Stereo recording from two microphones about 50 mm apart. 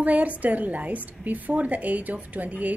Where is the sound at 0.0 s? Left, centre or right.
Right.